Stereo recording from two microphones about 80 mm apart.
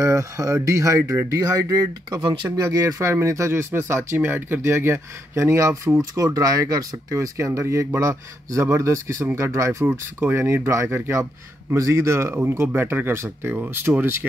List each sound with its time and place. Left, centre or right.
0.0 s speech: right
2.2 s speech: right
2.6 s speech: right